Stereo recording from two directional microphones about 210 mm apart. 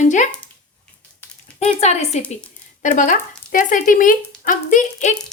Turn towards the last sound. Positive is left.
turn(degrees=35)  # may be behind; listen again after turning